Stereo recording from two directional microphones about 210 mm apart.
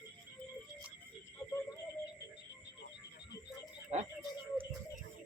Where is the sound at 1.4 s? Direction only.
15° left (ahead or behind).